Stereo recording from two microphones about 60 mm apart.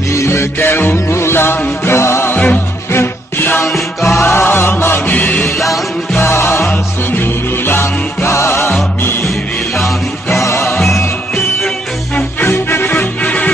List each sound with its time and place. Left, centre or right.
0.1 s music: left
2.3 s music: left
2.9 s music: left
4.1 s music: left
5.1 s music: left
6.1 s music: left
9.3 s music: centre
10.2 s music: left
12.4 s music: left
12.9 s music: left